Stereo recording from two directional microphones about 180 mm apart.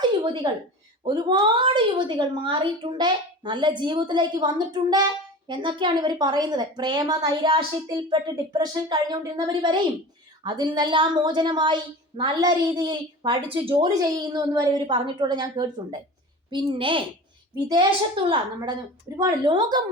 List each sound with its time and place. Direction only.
0.4 s a woman's voice: 25° right (ahead or behind)